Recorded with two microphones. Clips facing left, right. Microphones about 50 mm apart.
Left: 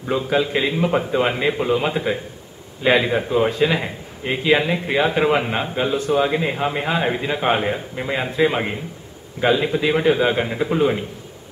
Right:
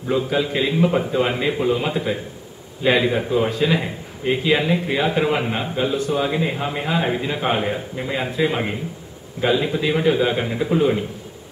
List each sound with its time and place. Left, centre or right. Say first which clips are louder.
0.1 s a man's voice: left 1 dB; centre
1.6 s a man's voice: left 1 dB; centre